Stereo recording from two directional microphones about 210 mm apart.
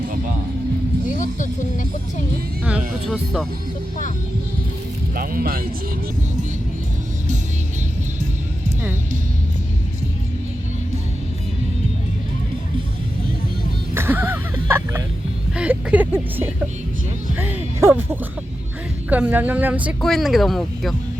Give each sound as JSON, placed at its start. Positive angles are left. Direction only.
{"t": 1.0, "sound": "speech", "side_deg": 35}
{"t": 5.1, "sound": "speech", "side_deg": -45}
{"t": 13.9, "sound": "music", "side_deg": -10}
{"t": 15.5, "sound": "speech", "side_deg": -5}
{"t": 17.3, "sound": "music", "side_deg": -10}
{"t": 19.1, "sound": "speech", "side_deg": -10}